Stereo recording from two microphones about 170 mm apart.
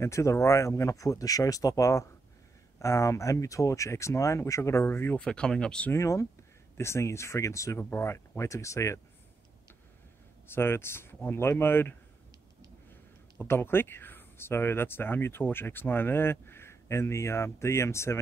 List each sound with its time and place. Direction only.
0.0 s speech: 15° left (ahead or behind)
5.9 s speech: 15° left (ahead or behind)
10.5 s speech: 15° left (ahead or behind)
13.4 s speech: 15° left (ahead or behind)